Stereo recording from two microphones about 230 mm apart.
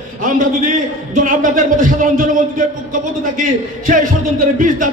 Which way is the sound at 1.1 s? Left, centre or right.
Right.